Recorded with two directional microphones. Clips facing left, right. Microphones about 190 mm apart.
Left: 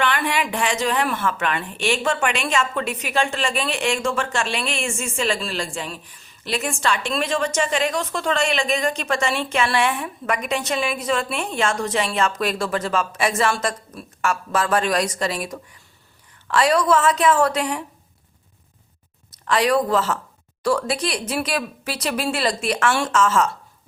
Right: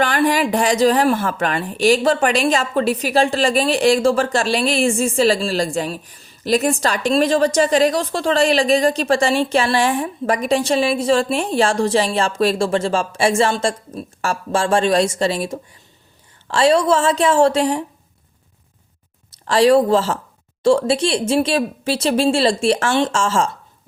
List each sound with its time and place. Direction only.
0.0 s speech: 40° right (ahead or behind)
19.5 s speech: 30° right (ahead or behind)